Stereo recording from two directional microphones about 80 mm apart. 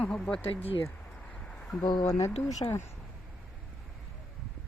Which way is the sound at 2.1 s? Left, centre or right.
Left.